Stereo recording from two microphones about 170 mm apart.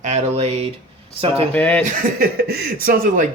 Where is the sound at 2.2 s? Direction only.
60° right (ahead or behind).